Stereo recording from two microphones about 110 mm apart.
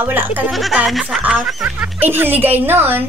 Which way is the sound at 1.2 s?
15° right (ahead or behind).